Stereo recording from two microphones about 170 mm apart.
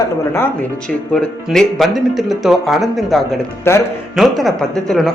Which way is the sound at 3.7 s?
15° left (ahead or behind).